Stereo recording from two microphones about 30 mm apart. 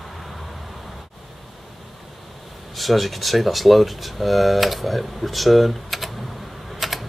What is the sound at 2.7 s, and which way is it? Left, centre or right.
Speech, centre.